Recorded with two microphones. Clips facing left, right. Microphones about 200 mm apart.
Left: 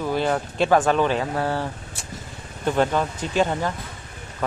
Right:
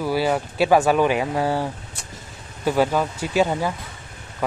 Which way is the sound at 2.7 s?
5° right (ahead or behind).